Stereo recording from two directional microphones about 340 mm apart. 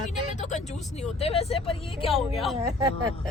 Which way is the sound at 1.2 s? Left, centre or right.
Centre.